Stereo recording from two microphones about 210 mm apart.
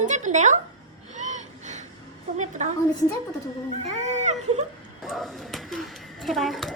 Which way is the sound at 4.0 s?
35° right (ahead or behind).